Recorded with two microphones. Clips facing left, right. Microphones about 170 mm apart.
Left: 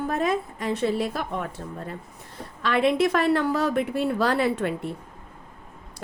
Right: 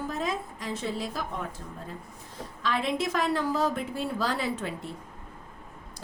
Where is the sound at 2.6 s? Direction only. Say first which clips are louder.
Left 7 dB; 65° left (ahead or behind).